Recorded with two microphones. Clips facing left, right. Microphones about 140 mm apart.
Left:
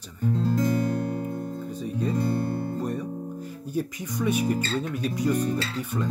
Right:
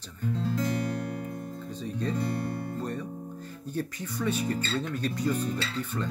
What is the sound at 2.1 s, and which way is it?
Speech, 35° left (ahead or behind).